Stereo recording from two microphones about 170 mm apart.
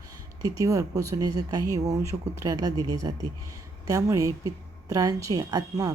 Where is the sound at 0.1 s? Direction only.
20° right (ahead or behind).